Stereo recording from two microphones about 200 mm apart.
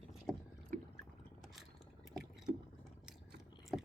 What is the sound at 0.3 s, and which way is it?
Rowboat, centre (ahead or behind).